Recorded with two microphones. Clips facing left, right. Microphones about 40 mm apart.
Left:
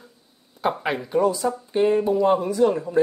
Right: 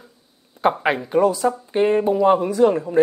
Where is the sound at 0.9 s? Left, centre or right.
Centre.